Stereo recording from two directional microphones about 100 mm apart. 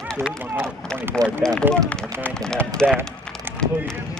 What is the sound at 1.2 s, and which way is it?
Speech, 5° left (ahead or behind).